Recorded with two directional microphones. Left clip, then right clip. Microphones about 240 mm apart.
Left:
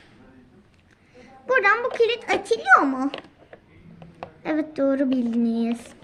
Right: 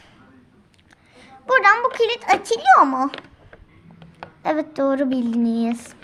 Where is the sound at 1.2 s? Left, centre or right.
Right.